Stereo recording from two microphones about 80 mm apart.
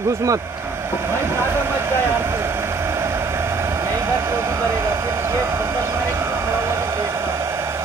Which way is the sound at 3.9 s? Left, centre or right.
Right.